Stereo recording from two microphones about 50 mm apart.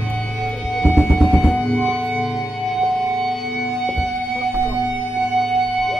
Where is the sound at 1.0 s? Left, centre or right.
Centre.